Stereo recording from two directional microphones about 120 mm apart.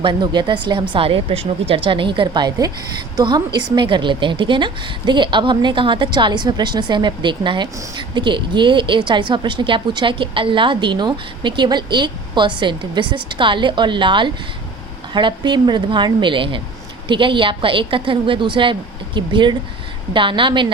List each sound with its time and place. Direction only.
0.0 s a woman's voice: 40° right (ahead or behind)